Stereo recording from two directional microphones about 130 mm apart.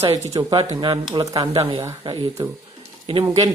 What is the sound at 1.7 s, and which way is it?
Speech, 25° right (ahead or behind).